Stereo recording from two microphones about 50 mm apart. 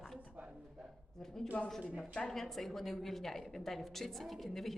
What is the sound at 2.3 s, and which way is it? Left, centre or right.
A woman's voice, centre.